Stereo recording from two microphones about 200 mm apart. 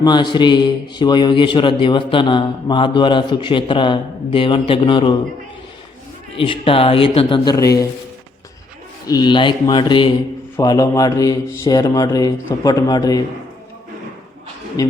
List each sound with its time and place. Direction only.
0.0 s a man's voice: 20° left (ahead or behind)
6.3 s a man's voice: 25° left (ahead or behind)
9.0 s a man's voice: 20° left (ahead or behind)
14.8 s speech: 15° left (ahead or behind)